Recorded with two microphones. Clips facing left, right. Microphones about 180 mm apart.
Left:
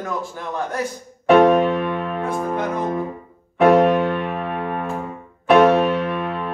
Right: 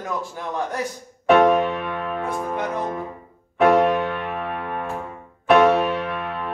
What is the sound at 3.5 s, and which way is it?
Music, centre (ahead or behind).